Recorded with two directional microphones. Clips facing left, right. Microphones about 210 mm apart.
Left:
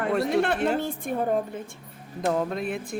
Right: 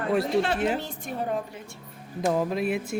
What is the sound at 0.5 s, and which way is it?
Speech, 5° right (ahead or behind).